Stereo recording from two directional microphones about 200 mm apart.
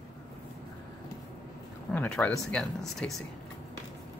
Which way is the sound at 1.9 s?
5° left (ahead or behind).